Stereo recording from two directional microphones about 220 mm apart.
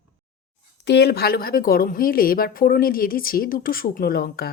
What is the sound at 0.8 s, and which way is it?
Speech, 50° left (ahead or behind).